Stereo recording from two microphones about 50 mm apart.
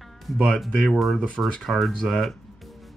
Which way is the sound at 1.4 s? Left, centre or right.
Centre.